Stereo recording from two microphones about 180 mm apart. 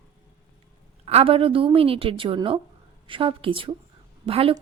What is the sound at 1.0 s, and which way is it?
A woman's voice, 35° right (ahead or behind).